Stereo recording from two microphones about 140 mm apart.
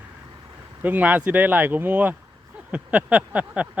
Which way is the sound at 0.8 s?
10° right (ahead or behind).